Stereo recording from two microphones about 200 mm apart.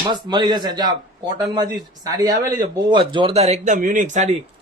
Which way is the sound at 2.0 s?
20° right (ahead or behind).